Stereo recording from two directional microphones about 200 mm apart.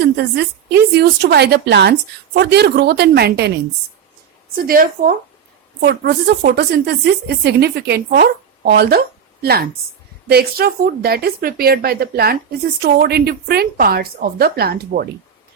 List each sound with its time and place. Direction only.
0.0 s a woman's voice: 55° right (ahead or behind)
4.5 s a woman's voice: 45° right (ahead or behind)